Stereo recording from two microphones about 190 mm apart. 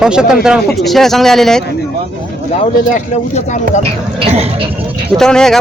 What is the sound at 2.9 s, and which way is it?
Speech, 40° left (ahead or behind).